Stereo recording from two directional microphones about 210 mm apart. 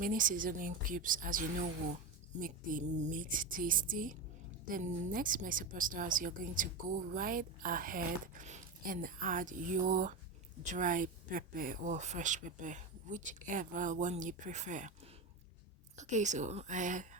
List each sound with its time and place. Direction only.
0.0 s a woman's voice: 40° right (ahead or behind)